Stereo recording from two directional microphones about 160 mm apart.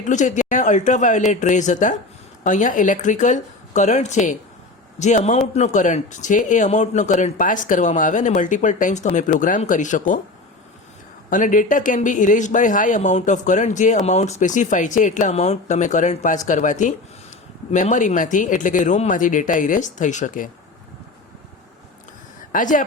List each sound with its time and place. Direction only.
0.0 s speech: 50° left (ahead or behind)
11.3 s speech: 55° left (ahead or behind)
22.5 s speech: 55° left (ahead or behind)